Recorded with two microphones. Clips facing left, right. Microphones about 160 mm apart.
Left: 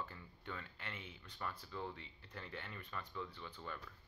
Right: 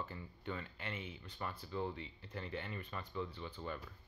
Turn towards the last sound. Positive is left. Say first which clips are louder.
# right 5 dB
turn(degrees=-15)  # may be behind; listen again after turning